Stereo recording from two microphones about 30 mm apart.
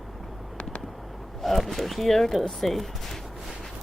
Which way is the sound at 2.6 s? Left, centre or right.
Centre.